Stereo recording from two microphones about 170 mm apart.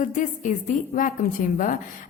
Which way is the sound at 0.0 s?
55° left (ahead or behind).